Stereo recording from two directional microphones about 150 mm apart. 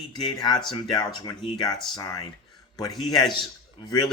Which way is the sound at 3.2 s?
30° left (ahead or behind).